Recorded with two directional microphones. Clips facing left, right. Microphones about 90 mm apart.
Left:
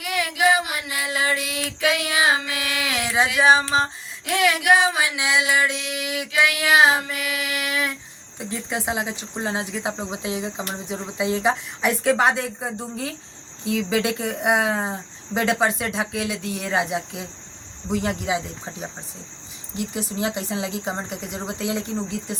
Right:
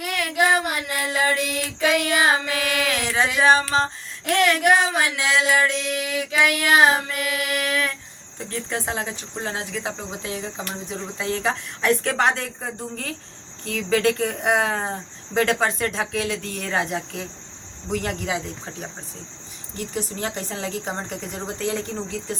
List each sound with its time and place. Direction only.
0.0 s a sound: 5° left (ahead or behind)
1.9 s child singing: 5° left (ahead or behind)
2.6 s mantra: 5° left (ahead or behind)
3.3 s cricket: 10° left (ahead or behind)